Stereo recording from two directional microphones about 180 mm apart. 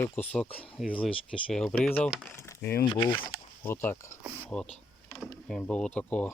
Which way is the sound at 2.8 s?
25° left (ahead or behind).